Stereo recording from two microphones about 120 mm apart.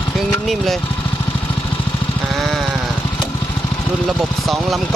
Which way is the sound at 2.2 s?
Centre (ahead or behind).